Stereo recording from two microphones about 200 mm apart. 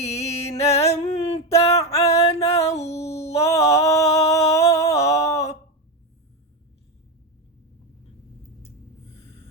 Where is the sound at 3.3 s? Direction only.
30° left (ahead or behind).